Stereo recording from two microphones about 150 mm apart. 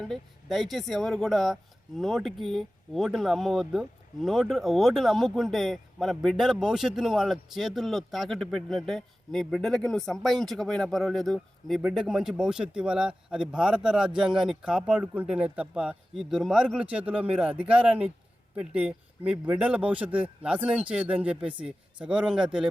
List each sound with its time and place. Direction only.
0.0 s speech: centre (ahead or behind)